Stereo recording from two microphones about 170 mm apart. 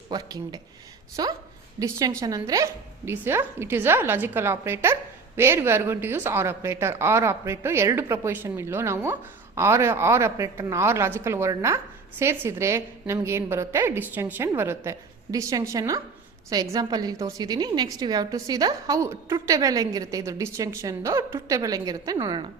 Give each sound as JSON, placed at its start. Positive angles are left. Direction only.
{"t": 0.1, "sound": "a woman's voice", "side_deg": -20}